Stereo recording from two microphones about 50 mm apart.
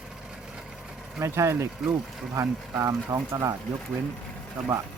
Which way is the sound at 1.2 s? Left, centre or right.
Right.